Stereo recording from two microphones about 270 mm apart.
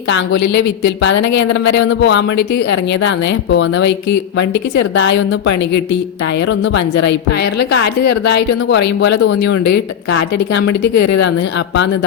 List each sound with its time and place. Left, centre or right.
0.4 s speech: left
0.9 s a woman's voice: left